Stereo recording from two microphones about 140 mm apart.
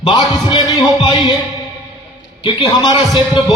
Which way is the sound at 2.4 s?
30° left (ahead or behind).